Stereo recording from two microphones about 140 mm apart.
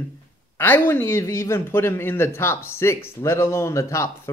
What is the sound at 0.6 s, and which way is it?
A man's voice, 15° left (ahead or behind).